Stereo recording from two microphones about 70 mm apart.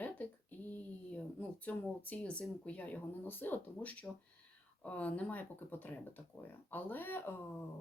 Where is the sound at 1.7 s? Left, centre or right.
Left.